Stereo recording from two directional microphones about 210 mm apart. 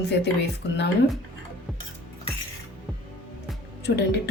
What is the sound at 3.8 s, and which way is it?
Speech, 50° left (ahead or behind).